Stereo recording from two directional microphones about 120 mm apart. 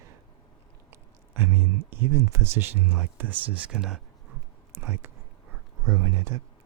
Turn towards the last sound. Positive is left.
turn(degrees=-25)  # may be behind; listen again after turning